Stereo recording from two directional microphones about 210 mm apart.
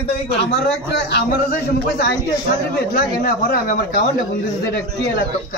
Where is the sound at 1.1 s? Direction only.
45° left (ahead or behind).